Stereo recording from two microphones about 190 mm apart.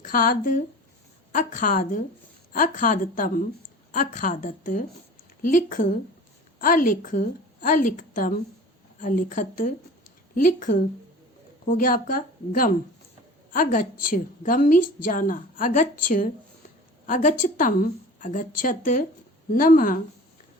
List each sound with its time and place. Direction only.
0.0 s a woman's voice: 45° left (ahead or behind)